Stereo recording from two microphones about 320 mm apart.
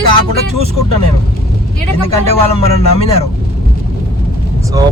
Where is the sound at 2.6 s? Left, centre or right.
Centre.